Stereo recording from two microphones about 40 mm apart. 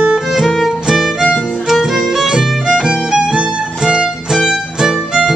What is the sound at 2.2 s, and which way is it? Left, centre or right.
Music, centre.